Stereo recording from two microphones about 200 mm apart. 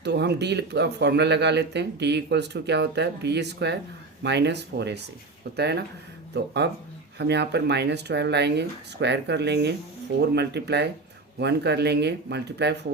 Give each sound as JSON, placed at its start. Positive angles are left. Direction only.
{"t": 0.0, "sound": "speech", "side_deg": -55}